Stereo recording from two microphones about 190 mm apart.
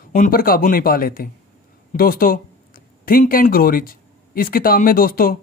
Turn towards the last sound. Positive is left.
turn(degrees=50)  # may be behind; listen again after turning